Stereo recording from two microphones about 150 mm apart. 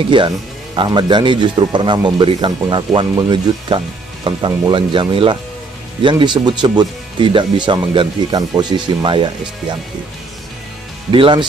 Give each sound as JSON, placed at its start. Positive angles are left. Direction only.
{"t": 0.1, "sound": "speech", "side_deg": -30}
{"t": 11.1, "sound": "speech", "side_deg": -35}